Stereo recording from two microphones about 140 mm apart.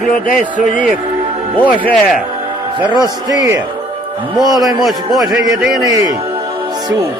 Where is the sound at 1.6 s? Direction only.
10° left (ahead or behind).